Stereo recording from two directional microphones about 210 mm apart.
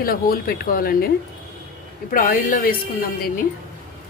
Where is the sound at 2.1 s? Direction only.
40° left (ahead or behind).